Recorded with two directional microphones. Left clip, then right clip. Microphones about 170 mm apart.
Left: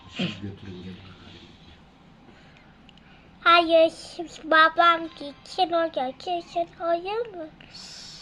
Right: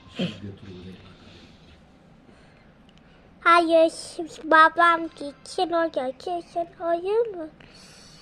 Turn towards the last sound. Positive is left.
turn(degrees=-30)  # may be behind; listen again after turning